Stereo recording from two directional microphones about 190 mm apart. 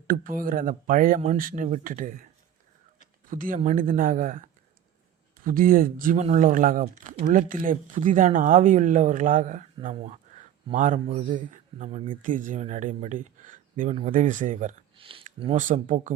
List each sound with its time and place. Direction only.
0.1 s speech: 45° right (ahead or behind)
3.2 s speech: 45° right (ahead or behind)
5.5 s speech: 50° right (ahead or behind)
14.9 s a sound: 30° right (ahead or behind)
15.6 s speech: 40° right (ahead or behind)